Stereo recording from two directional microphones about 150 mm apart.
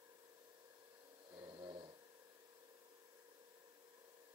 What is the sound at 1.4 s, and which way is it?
Snoring, 25° right (ahead or behind).